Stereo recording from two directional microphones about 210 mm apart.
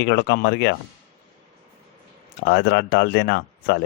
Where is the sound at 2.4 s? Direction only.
50° left (ahead or behind).